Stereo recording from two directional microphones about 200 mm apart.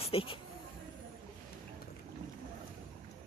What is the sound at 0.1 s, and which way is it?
Speech, 25° left (ahead or behind).